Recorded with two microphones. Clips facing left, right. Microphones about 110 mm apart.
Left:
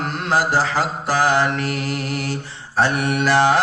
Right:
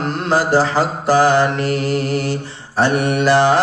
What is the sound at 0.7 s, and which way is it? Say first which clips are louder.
Mantra: right 5 dB; 30° right (ahead or behind).